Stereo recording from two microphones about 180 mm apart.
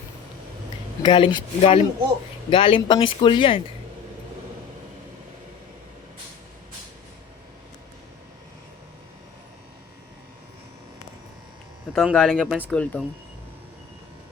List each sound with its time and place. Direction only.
1.0 s speech: 25° left (ahead or behind)
11.9 s speech: centre (ahead or behind)
12.7 s speech: 5° left (ahead or behind)